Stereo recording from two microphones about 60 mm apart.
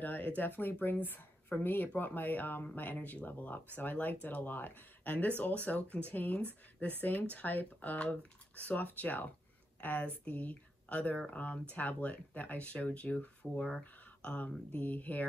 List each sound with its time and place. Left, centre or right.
0.0 s speech: left